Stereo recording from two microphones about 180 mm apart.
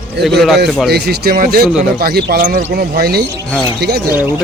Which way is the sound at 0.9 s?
60° right (ahead or behind).